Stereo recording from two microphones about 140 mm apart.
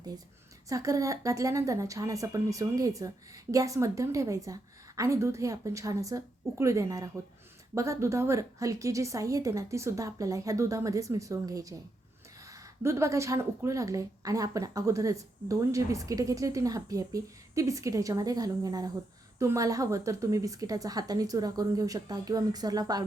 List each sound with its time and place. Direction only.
0.7 s a woman's voice: 25° right (ahead or behind)